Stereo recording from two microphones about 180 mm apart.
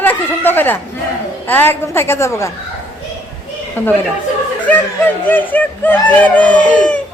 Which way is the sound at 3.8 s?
10° left (ahead or behind).